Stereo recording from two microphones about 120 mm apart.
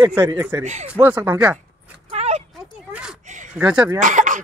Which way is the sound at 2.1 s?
60° right (ahead or behind).